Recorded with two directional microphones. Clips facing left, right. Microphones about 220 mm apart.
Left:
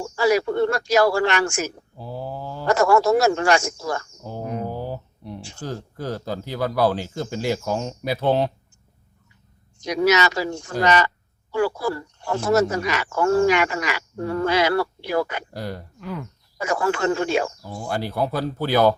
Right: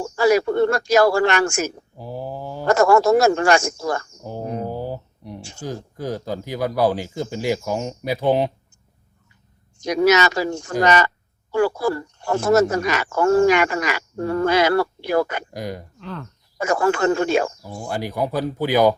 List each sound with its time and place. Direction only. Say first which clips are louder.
0.0 s speech: right 3 dB; 50° right (ahead or behind)
2.0 s a sound: right 1 dB; 15° right (ahead or behind)
2.6 s speech: right 2 dB; 45° right (ahead or behind)
4.2 s speech: right 2 dB; 15° right (ahead or behind)
4.6 s a sound: right 2 dB; 15° right (ahead or behind)
5.6 s speech: right 2 dB; 15° right (ahead or behind)
9.7 s speech: right 3 dB; 45° right (ahead or behind)
15.5 s speech: right 1 dB; 15° right (ahead or behind)
16.0 s speech: left 2 dB; 10° left (ahead or behind)
16.6 s speech: right 3 dB; 50° right (ahead or behind)
17.6 s speech: even; 15° right (ahead or behind)